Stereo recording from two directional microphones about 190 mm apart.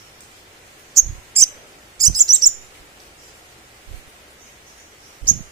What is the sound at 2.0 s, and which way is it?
Chirp, 20° right (ahead or behind).